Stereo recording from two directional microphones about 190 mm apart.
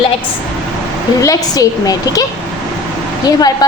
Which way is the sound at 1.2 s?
20° left (ahead or behind).